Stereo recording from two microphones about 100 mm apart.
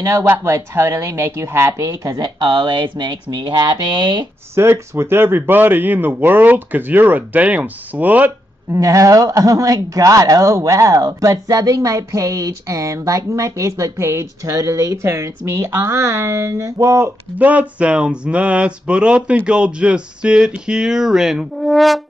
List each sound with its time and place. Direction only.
0.2 s speech: 25° right (ahead or behind)
2.2 s speech: 50° right (ahead or behind)
4.6 s speech: 25° right (ahead or behind)
8.7 s speech: 35° right (ahead or behind)
17.4 s speech: 15° right (ahead or behind); by 22.0 s centre (ahead or behind)